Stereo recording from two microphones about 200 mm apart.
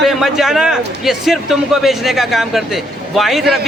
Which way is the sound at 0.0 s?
Centre (ahead or behind).